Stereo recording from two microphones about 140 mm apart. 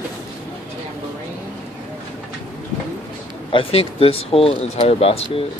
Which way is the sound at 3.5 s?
40° left (ahead or behind).